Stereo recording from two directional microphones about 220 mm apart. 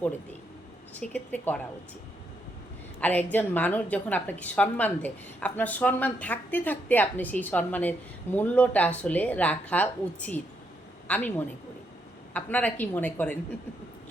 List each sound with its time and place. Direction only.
0.9 s a woman's voice: 5° left (ahead or behind)
3.0 s a woman's voice: 5° left (ahead or behind)